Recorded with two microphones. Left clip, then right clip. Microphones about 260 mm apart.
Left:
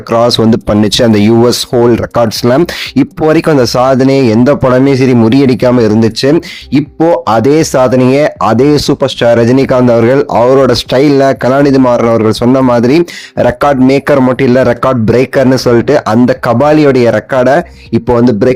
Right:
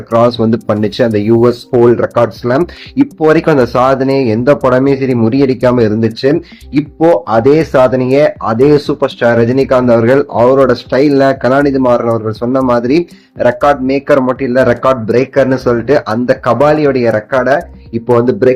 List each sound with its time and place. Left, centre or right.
0.1 s speech: left